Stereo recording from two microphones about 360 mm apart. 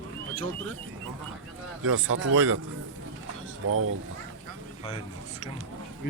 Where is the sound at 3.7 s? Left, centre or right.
Right.